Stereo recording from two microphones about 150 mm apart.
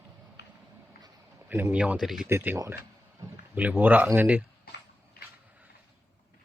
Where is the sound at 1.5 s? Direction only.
15° right (ahead or behind).